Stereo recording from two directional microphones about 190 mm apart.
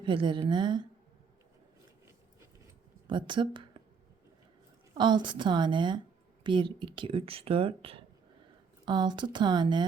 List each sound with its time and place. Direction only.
0.0 s speech: 25° right (ahead or behind)
3.1 s speech: 25° right (ahead or behind)
4.9 s speech: 25° right (ahead or behind)